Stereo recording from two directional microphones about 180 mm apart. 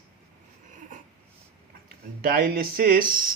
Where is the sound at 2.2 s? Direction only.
55° right (ahead or behind).